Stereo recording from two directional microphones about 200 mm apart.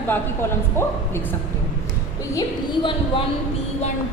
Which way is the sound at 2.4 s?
25° left (ahead or behind).